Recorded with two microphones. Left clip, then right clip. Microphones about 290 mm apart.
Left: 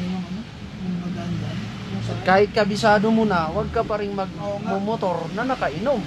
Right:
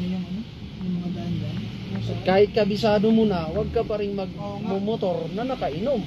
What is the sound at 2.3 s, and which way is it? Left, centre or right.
Speech, centre.